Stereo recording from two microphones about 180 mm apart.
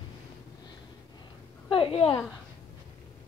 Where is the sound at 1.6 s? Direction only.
30° left (ahead or behind).